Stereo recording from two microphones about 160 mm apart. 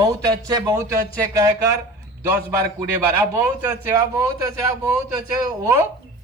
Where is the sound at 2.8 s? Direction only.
20° right (ahead or behind).